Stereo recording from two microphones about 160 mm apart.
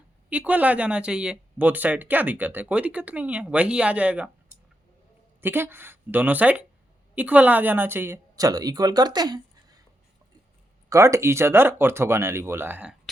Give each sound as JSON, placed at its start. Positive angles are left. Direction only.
{"t": 0.3, "sound": "speech", "side_deg": -10}
{"t": 10.8, "sound": "speech", "side_deg": -20}